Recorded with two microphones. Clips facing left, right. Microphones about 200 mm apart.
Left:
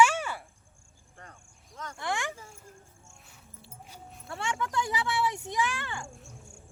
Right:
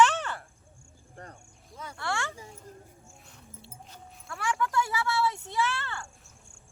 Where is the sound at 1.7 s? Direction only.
10° right (ahead or behind).